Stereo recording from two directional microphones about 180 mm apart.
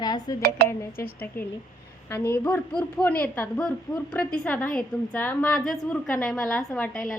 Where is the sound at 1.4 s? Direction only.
55° left (ahead or behind).